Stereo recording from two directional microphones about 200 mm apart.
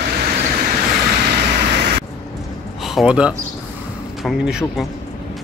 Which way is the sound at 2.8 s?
Centre (ahead or behind).